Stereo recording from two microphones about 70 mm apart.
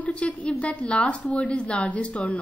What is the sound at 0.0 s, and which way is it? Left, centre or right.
A woman's voice, centre.